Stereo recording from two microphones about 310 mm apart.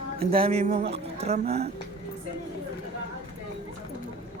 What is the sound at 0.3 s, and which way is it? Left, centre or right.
Speech, centre.